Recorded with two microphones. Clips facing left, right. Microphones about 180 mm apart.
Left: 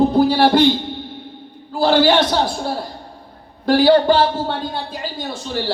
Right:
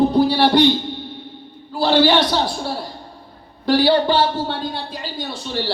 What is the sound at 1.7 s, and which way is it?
A man's voice, 45° left (ahead or behind).